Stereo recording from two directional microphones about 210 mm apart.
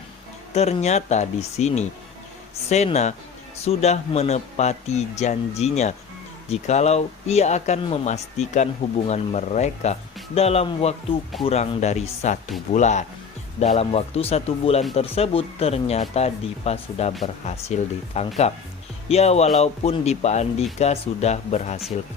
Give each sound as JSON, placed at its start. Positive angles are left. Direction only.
{"t": 0.5, "sound": "speech", "side_deg": 30}